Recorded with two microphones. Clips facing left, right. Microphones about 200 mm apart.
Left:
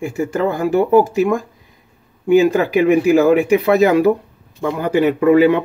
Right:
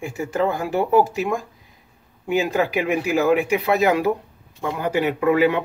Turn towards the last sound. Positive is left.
turn(degrees=45)  # may be behind; listen again after turning